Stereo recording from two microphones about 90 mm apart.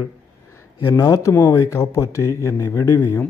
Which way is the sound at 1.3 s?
20° left (ahead or behind).